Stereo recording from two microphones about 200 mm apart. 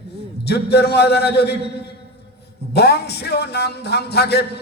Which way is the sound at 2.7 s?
55° left (ahead or behind).